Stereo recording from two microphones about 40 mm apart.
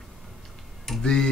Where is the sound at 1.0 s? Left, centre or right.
Centre.